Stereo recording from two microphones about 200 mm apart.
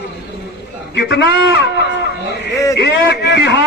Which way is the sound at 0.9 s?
60° left (ahead or behind).